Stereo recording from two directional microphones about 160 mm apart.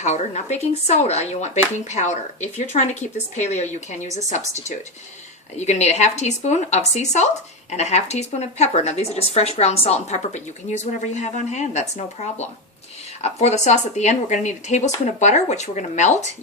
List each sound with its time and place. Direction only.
0.0 s speech: 45° left (ahead or behind)